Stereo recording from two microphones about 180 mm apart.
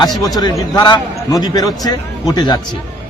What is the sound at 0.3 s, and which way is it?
A man's voice, 20° left (ahead or behind).